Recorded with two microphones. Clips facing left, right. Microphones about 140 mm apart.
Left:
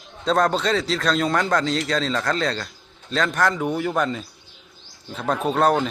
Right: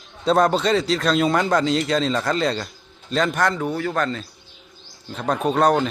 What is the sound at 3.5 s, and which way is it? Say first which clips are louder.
A man's voice: left 1 dB; 15° left (ahead or behind).